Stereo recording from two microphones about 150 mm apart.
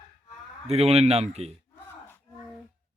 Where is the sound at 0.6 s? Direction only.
45° right (ahead or behind).